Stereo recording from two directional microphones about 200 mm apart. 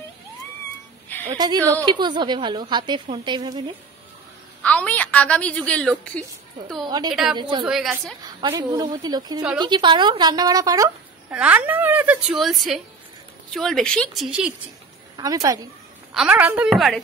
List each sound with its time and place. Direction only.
1.3 s a woman's voice: 20° right (ahead or behind)
4.6 s a woman's voice: 5° left (ahead or behind)
7.3 s a woman's voice: 25° right (ahead or behind)
7.6 s speech: 5° right (ahead or behind)
8.4 s a woman's voice: 20° right (ahead or behind); by 14.5 s centre (ahead or behind)
15.1 s a woman's voice: 20° right (ahead or behind)
16.1 s speech: 5° right (ahead or behind)